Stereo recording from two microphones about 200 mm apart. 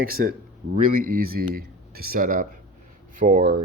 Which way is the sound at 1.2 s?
50° right (ahead or behind).